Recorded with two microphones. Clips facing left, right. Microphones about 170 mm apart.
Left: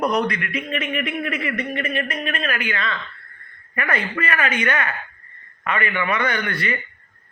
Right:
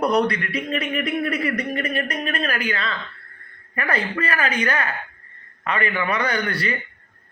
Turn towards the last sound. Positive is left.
turn(degrees=-35)  # may be behind; listen again after turning